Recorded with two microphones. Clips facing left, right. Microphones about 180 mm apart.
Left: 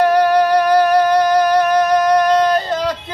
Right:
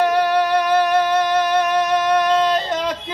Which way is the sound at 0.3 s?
40° left (ahead or behind).